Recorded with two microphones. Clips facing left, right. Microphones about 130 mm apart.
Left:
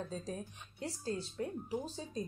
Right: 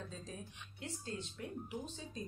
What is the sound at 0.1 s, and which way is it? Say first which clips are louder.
Speech: left 7 dB; 40° left (ahead or behind).